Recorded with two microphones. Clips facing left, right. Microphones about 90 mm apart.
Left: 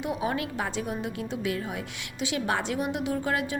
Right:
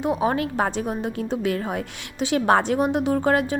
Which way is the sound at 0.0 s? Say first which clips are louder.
Right 7 dB; 35° right (ahead or behind).